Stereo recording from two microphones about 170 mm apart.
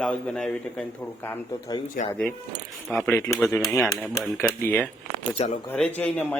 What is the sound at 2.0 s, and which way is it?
Speech, 55° left (ahead or behind).